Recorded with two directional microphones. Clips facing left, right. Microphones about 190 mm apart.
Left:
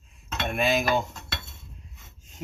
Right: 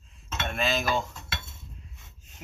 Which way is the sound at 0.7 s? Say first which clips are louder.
Left 4 dB; 55° left (ahead or behind).